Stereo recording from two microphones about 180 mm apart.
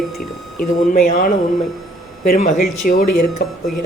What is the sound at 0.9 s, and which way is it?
A man's voice, 45° left (ahead or behind).